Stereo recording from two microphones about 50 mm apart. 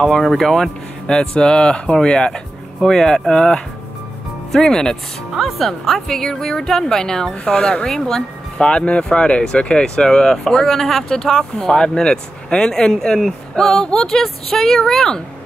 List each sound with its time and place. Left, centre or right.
0.0 s speech: centre
1.1 s speech: centre
5.3 s speech: centre
8.5 s speech: centre